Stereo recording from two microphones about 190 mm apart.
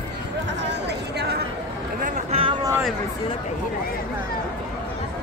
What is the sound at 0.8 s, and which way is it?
Chatter, 60° right (ahead or behind).